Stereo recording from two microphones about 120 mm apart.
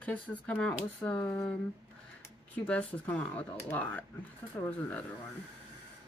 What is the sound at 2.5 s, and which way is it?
Speech, 10° left (ahead or behind).